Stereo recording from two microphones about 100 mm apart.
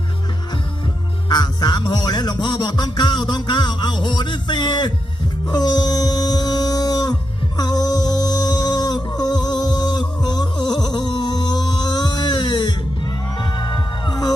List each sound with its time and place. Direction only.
1.3 s music: 45° left (ahead or behind)
10.2 s a sound: 45° left (ahead or behind)
13.4 s heart sounds: 50° left (ahead or behind)